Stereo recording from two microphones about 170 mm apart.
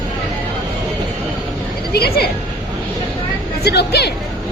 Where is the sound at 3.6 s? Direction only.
70° left (ahead or behind).